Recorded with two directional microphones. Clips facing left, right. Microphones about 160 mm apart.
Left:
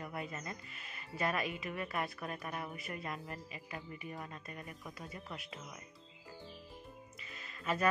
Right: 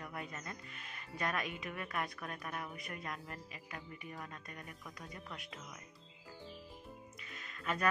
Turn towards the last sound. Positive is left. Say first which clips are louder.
# left 2 dB
turn(degrees=0)  # may be behind; listen again after turning